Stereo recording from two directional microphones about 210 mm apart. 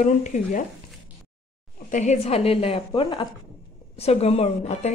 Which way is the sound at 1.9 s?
35° left (ahead or behind).